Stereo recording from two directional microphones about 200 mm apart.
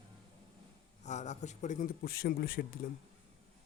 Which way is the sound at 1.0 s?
35° left (ahead or behind).